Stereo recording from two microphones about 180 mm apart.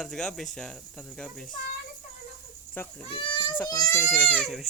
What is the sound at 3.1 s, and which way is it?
A child's voice, 30° left (ahead or behind).